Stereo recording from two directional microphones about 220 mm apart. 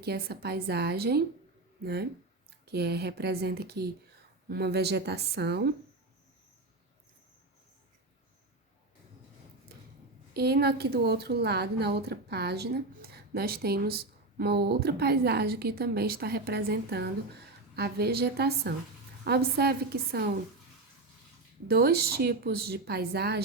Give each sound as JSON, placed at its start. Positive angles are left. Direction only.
{"t": 0.0, "sound": "a woman's voice", "side_deg": -45}
{"t": 10.3, "sound": "a woman's voice", "side_deg": -45}
{"t": 21.7, "sound": "a woman's voice", "side_deg": -45}